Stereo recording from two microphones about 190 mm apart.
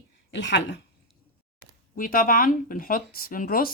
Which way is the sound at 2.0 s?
50° left (ahead or behind).